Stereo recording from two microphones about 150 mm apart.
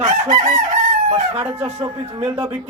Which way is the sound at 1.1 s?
40° right (ahead or behind).